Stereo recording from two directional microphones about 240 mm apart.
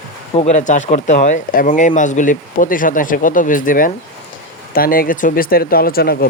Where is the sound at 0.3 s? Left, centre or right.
Left.